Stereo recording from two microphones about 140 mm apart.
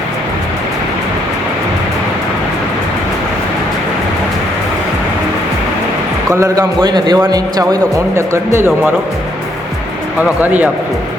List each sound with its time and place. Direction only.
6.3 s a man's voice: 25° right (ahead or behind)
10.4 s speech: 10° right (ahead or behind)